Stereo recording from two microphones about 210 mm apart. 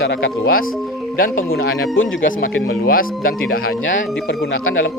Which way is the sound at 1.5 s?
70° left (ahead or behind).